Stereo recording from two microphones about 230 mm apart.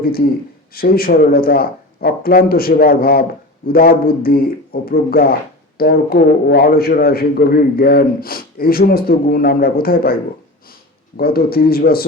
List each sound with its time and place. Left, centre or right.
0.7 s a man's voice: left
11.2 s a man's voice: left